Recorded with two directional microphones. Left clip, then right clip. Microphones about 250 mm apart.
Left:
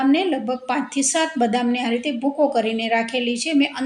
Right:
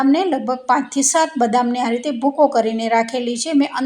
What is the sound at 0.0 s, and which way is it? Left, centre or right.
Speech, centre.